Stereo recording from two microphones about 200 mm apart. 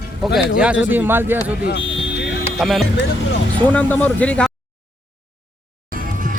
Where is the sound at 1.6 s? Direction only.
60° left (ahead or behind).